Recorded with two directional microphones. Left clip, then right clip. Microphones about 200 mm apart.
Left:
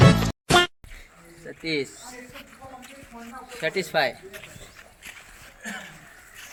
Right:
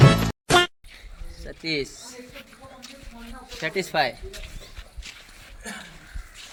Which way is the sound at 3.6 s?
60° right (ahead or behind).